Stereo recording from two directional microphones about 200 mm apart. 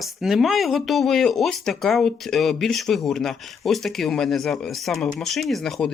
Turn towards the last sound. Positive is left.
turn(degrees=0)  # may be behind; listen again after turning